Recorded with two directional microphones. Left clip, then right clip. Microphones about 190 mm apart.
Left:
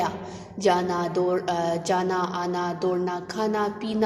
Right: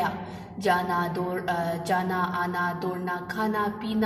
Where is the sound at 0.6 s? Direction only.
20° left (ahead or behind).